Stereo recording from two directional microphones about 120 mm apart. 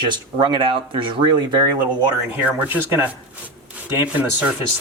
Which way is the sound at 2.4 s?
15° right (ahead or behind).